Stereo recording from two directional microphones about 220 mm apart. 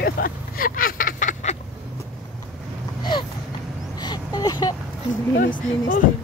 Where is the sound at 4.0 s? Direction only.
20° left (ahead or behind).